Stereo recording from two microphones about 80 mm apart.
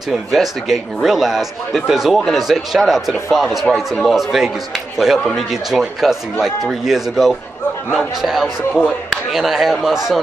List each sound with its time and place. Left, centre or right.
0.1 s speech: centre